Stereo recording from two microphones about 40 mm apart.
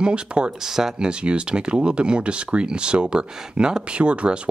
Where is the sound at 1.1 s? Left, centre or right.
Right.